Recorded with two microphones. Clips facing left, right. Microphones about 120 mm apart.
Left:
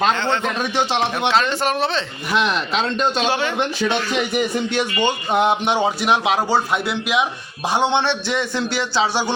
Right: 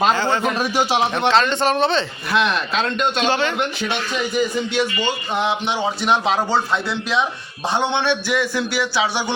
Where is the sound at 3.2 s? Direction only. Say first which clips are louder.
Right 1 dB; 10° left (ahead or behind).